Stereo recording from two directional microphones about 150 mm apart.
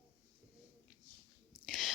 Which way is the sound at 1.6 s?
Centre (ahead or behind).